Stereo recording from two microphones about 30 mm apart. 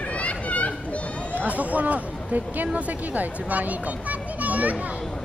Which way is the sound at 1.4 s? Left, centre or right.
Right.